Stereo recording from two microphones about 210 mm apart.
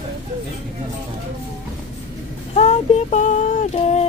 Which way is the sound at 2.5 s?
30° left (ahead or behind).